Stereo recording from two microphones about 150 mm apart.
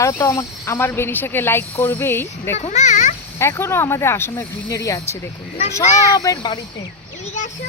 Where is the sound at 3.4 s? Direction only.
15° left (ahead or behind).